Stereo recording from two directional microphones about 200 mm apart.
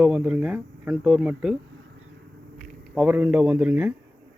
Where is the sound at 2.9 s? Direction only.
10° right (ahead or behind).